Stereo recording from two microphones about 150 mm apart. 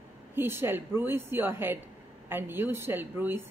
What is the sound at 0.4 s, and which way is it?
A woman's voice, 15° right (ahead or behind).